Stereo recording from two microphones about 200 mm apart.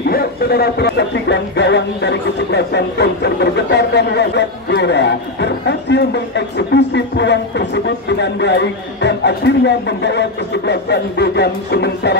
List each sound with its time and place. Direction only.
0.1 s speech: 50° left (ahead or behind)